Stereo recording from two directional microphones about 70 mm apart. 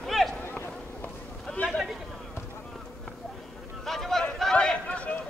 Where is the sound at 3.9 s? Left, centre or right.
Centre.